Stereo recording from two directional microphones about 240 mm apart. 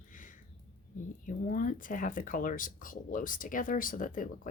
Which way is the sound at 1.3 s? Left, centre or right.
Left.